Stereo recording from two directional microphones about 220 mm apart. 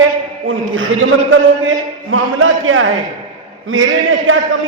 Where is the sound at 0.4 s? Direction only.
65° right (ahead or behind).